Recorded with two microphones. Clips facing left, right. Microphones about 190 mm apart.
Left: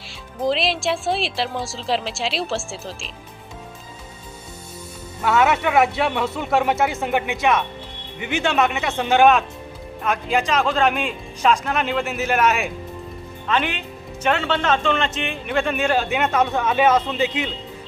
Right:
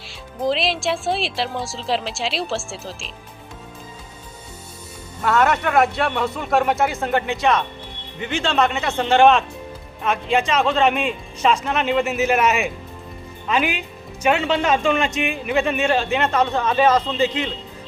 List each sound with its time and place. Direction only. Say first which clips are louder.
0.1 s speech: even; centre (ahead or behind)
5.2 s speech: even; 5° left (ahead or behind)